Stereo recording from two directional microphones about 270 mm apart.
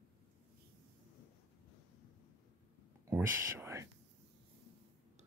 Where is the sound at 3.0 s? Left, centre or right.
Centre.